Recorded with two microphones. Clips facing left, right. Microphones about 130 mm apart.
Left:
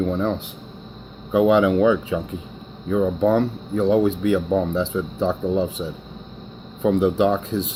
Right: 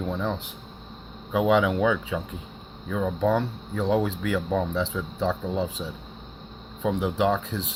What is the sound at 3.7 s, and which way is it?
Speech, 35° left (ahead or behind).